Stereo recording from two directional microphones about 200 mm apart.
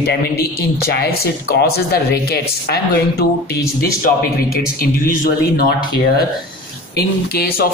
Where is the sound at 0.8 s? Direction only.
55° left (ahead or behind).